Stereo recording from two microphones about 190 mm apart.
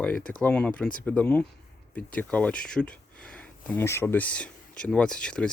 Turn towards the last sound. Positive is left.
turn(degrees=5)  # may be behind; listen again after turning